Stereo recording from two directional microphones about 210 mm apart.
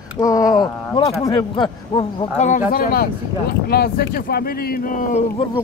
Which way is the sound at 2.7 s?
45° left (ahead or behind).